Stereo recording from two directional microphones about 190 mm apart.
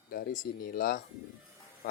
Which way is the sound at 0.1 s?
50° left (ahead or behind).